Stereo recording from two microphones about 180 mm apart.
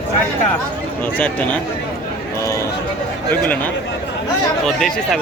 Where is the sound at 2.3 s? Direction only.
15° left (ahead or behind).